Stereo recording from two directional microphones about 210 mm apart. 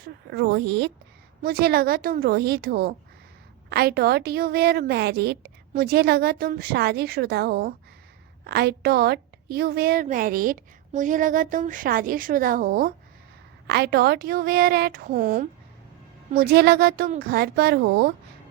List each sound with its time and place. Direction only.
0.0 s a woman's voice: 50° right (ahead or behind)